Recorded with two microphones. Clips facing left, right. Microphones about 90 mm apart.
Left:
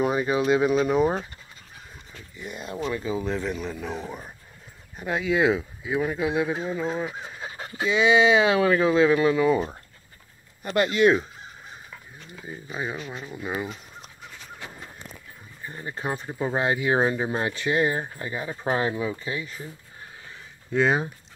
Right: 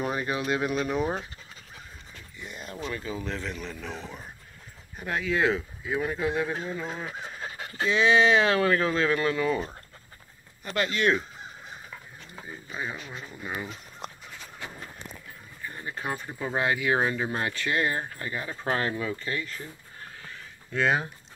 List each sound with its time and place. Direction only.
0.0 s speech: 5° left (ahead or behind)
2.3 s speech: 10° left (ahead or behind)
10.6 s speech: 20° left (ahead or behind)
12.4 s speech: 15° left (ahead or behind)
15.6 s speech: 25° left (ahead or behind)
20.7 s speech: 20° left (ahead or behind)